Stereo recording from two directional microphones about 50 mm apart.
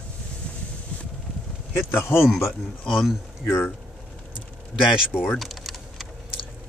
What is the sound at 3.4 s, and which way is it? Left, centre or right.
Speech, left.